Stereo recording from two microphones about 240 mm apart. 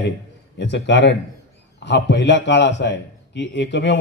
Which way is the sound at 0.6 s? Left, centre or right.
Left.